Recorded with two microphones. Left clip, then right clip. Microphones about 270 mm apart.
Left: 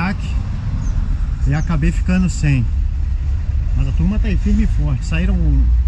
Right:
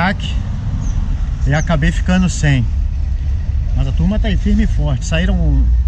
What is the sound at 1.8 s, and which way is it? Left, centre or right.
Speech, right.